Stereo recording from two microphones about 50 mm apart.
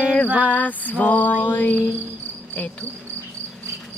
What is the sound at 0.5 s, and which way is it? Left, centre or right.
Music, left.